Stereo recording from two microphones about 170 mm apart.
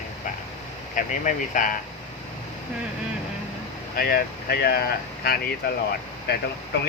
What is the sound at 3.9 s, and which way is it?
Speech, 65° left (ahead or behind).